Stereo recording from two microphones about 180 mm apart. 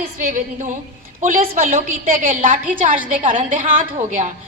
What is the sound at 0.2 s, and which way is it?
A woman's voice, 45° right (ahead or behind).